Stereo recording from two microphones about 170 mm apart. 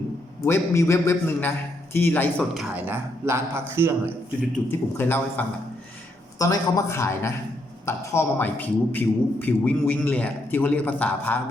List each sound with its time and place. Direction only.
0.4 s a man's voice: 15° left (ahead or behind)
2.4 s speech: centre (ahead or behind)
2.8 s a man's voice: 15° right (ahead or behind)
4.5 s a man's voice: 15° left (ahead or behind)